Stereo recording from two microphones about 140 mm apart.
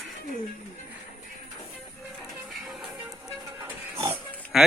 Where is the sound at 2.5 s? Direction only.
Centre (ahead or behind).